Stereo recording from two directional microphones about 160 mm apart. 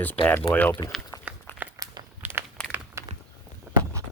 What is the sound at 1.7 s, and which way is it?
Crumpling, 20° right (ahead or behind).